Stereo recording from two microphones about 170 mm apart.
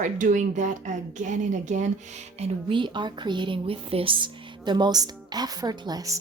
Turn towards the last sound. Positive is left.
turn(degrees=-20)  # may be behind; listen again after turning